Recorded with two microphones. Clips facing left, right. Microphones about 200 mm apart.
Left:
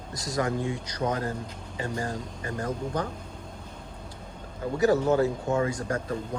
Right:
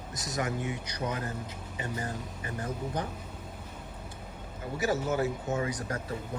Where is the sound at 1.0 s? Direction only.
45° left (ahead or behind).